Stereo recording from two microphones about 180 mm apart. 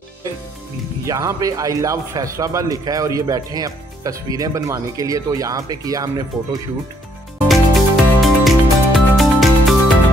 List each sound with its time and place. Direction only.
1.0 s speech: 20° right (ahead or behind)
7.4 s music: centre (ahead or behind)